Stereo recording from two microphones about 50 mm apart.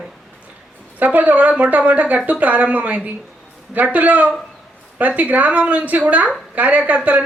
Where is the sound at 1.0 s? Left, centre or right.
Right.